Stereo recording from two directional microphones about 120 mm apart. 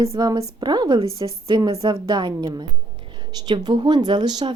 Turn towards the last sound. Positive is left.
turn(degrees=-35)  # may be behind; listen again after turning